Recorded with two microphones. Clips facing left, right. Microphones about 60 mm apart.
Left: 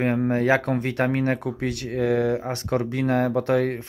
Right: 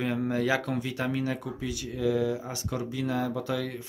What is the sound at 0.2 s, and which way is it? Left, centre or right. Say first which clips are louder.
Speech: left 6 dB; left.